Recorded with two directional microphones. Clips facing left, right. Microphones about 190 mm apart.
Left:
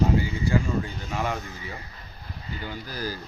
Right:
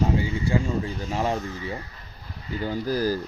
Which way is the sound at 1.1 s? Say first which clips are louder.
Right 4 dB; 30° right (ahead or behind).